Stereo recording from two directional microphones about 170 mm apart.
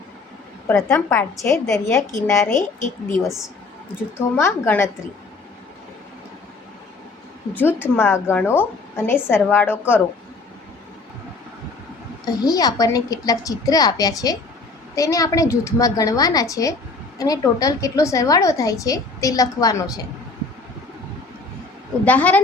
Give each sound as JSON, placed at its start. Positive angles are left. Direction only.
{"t": 0.7, "sound": "a woman's voice", "side_deg": 15}
{"t": 2.5, "sound": "a woman's voice", "side_deg": 50}
{"t": 4.4, "sound": "a woman's voice", "side_deg": 15}
{"t": 7.5, "sound": "a woman's voice", "side_deg": 10}
{"t": 12.2, "sound": "a woman's voice", "side_deg": 25}
{"t": 22.0, "sound": "a woman's voice", "side_deg": 10}